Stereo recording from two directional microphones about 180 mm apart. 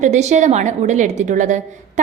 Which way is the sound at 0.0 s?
40° right (ahead or behind).